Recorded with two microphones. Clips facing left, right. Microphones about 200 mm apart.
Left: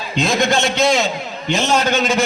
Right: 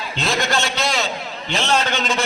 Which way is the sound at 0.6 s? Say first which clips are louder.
Left 7 dB; 50° left (ahead or behind).